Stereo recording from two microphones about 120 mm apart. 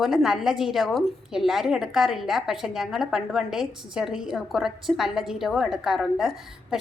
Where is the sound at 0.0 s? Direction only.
5° right (ahead or behind).